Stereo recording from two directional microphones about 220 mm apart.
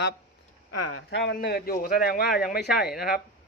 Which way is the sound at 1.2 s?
50° left (ahead or behind).